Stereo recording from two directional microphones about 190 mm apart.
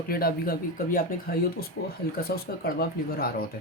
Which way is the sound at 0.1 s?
50° left (ahead or behind).